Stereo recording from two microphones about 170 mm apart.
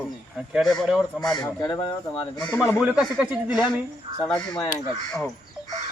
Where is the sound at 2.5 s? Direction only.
15° left (ahead or behind).